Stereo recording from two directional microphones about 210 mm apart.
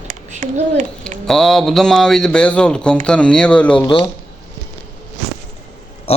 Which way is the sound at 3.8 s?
25° left (ahead or behind).